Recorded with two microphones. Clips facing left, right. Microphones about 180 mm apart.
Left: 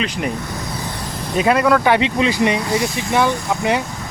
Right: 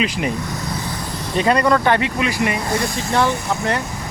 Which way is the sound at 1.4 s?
5° left (ahead or behind).